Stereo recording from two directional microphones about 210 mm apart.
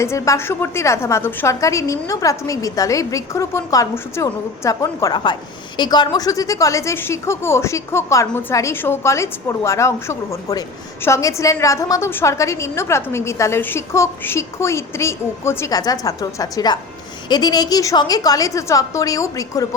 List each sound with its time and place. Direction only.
0.0 s a woman's voice: 15° left (ahead or behind)